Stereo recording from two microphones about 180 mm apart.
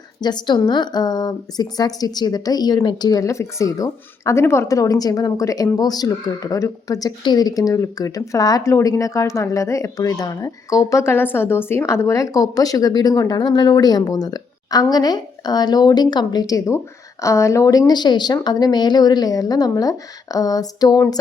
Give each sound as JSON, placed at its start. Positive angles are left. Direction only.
{"t": 0.2, "sound": "speech", "side_deg": 25}